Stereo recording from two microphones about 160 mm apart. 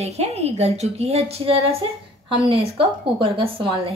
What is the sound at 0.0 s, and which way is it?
A woman's voice, 40° right (ahead or behind).